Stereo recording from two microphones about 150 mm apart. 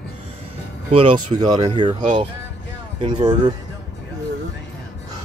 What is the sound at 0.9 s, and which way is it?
Speech, 30° right (ahead or behind).